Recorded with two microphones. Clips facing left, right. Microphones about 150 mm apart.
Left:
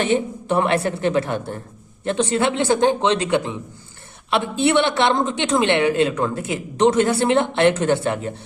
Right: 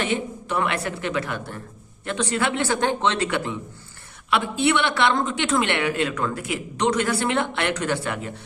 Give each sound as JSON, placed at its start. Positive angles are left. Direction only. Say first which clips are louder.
{"t": 0.0, "sound": "a woman's voice", "louder": "left 6 dB", "side_deg": 30}